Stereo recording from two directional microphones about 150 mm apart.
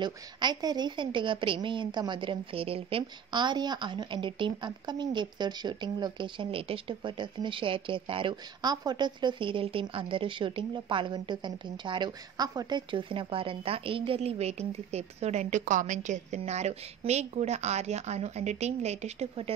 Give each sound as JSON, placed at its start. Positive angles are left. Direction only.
{"t": 0.0, "sound": "a woman's voice", "side_deg": -30}